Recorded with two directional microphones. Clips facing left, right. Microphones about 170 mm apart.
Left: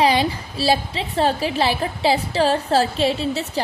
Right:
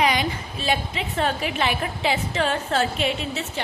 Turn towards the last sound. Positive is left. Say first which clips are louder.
# left 6 dB
turn(degrees=35)  # may be behind; listen again after turning